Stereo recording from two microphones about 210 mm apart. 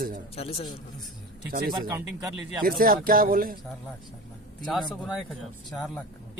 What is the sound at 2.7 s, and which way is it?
Speech, 45° right (ahead or behind).